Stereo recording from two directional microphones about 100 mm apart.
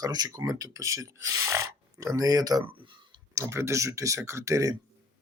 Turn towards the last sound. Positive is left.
turn(degrees=-35)  # may be behind; listen again after turning